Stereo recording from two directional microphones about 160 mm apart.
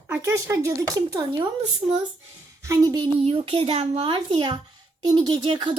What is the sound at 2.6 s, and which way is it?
Speech, 20° right (ahead or behind).